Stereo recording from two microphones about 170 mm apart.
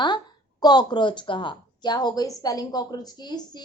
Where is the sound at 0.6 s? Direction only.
25° left (ahead or behind).